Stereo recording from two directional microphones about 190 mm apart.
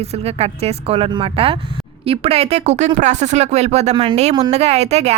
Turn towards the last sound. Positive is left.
turn(degrees=-35)  # may be behind; listen again after turning